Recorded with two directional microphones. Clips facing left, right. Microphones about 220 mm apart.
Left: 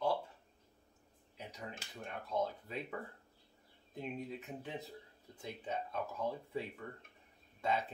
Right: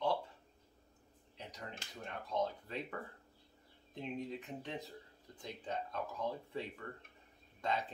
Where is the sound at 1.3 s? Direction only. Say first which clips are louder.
Left 1 dB; 5° left (ahead or behind).